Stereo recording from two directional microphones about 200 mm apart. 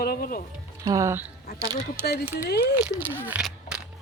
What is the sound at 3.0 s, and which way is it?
Speech, 10° right (ahead or behind).